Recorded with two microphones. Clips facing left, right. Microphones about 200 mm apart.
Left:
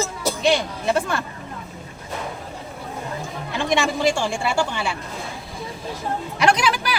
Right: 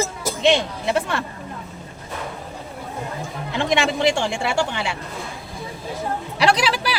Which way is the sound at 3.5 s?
20° right (ahead or behind).